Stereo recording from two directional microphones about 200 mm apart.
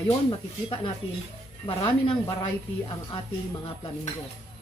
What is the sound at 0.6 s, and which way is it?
Speech, 25° left (ahead or behind).